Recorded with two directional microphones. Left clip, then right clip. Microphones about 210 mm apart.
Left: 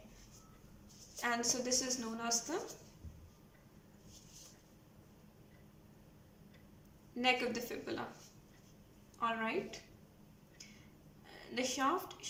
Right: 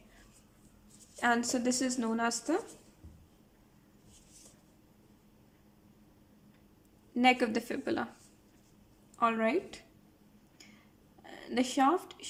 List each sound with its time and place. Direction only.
1.2 s a woman's voice: 55° right (ahead or behind)
7.2 s a woman's voice: 55° right (ahead or behind)
9.1 s a woman's voice: 55° right (ahead or behind)
11.3 s speech: 55° right (ahead or behind)